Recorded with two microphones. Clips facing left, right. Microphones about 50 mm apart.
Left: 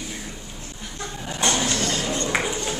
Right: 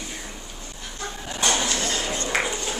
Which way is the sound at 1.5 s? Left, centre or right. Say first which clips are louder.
Left 1 dB; centre.